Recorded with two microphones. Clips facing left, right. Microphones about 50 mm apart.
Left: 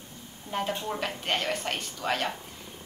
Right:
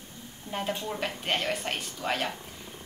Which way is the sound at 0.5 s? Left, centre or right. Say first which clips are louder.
Left 2 dB; centre.